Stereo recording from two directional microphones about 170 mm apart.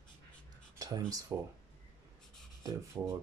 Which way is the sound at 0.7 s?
25° right (ahead or behind).